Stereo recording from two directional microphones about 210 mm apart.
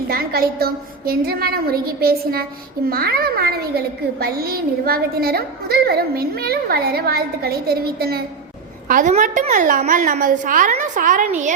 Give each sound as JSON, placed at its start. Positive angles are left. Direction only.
{"t": 0.1, "sound": "a woman's voice", "side_deg": -45}